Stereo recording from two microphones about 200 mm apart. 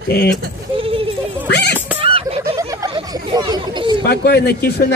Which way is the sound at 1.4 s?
55° left (ahead or behind).